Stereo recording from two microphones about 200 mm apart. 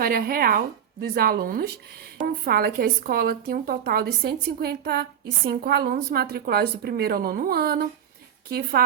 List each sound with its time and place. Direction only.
0.0 s a woman's voice: 45° right (ahead or behind)